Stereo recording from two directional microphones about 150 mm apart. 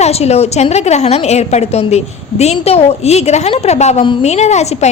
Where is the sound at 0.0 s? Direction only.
45° left (ahead or behind).